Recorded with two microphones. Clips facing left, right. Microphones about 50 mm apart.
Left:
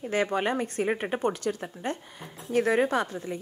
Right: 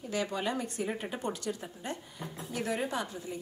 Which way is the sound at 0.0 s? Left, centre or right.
Left.